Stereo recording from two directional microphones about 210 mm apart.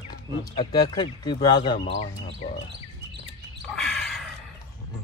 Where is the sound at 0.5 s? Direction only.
20° left (ahead or behind).